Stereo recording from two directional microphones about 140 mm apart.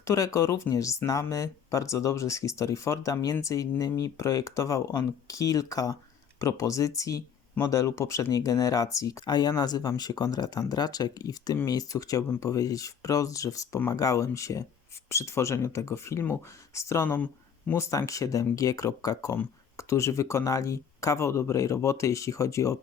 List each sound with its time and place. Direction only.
0.0 s speech: 20° left (ahead or behind)